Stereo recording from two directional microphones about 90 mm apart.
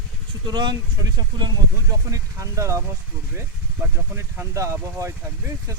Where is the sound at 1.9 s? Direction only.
40° right (ahead or behind).